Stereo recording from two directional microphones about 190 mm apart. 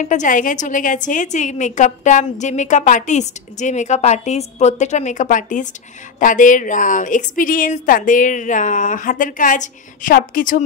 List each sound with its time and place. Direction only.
0.0 s a woman's voice: 40° left (ahead or behind)